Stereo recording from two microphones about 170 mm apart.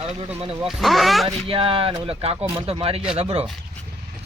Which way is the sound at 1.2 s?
30° right (ahead or behind).